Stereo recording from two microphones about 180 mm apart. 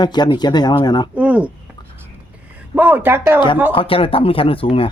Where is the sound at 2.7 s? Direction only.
10° right (ahead or behind).